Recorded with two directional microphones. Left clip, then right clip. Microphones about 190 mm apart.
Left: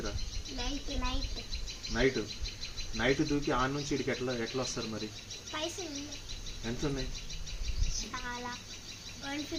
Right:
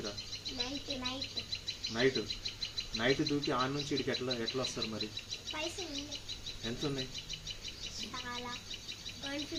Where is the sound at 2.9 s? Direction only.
20° left (ahead or behind).